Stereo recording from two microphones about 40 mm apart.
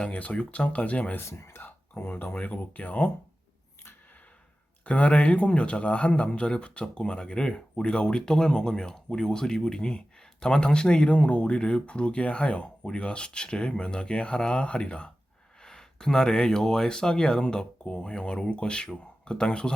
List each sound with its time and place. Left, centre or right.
0.0 s speech: left
1.1 s speech: left
4.9 s speech: left